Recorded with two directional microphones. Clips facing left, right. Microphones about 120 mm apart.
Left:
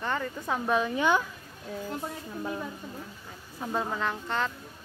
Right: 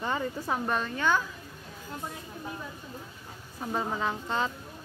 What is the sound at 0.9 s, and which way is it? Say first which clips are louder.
Speech: even; 15° left (ahead or behind).